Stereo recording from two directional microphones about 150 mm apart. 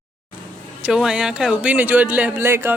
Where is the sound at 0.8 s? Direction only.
5° right (ahead or behind).